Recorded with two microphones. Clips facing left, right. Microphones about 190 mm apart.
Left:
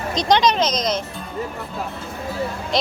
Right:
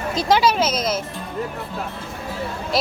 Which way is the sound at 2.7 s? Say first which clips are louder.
Even; 5° right (ahead or behind).